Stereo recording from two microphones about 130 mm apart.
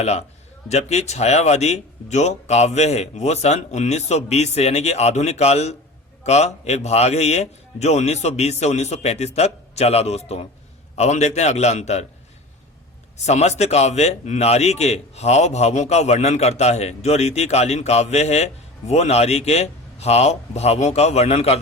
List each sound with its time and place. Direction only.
0.0 s a man's voice: 55° left (ahead or behind)
13.2 s a man's voice: 60° left (ahead or behind)